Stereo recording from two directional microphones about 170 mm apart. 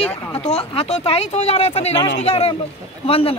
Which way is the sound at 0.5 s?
35° left (ahead or behind).